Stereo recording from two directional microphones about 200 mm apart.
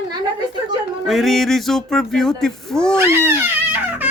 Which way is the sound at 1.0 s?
Centre (ahead or behind).